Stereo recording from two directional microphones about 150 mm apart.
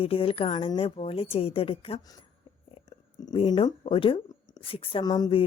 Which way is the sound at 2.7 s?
40° left (ahead or behind).